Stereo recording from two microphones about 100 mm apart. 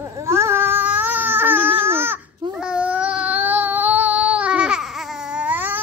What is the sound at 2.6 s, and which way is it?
Child singing, 10° right (ahead or behind).